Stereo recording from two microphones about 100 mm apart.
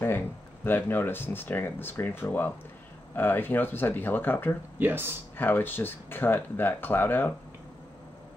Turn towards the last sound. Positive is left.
turn(degrees=20)  # may be behind; listen again after turning